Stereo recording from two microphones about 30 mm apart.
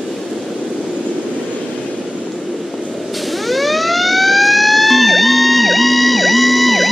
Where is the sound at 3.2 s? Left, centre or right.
Centre.